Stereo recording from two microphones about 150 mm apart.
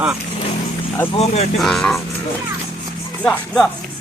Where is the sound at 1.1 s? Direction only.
45° left (ahead or behind).